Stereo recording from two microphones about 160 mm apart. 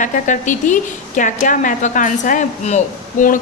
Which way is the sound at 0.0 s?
50° left (ahead or behind).